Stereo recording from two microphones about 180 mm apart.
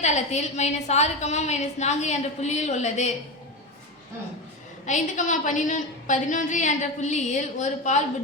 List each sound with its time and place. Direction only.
0.0 s a woman's voice: 40° left (ahead or behind)
4.9 s a woman's voice: 45° left (ahead or behind)